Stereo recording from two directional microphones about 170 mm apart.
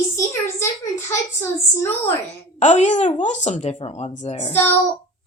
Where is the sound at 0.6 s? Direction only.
15° left (ahead or behind).